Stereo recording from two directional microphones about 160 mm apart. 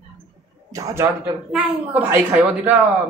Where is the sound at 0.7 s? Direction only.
20° right (ahead or behind).